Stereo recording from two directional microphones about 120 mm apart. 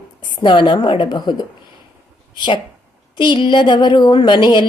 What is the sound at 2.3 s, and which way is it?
A woman's voice, 45° left (ahead or behind).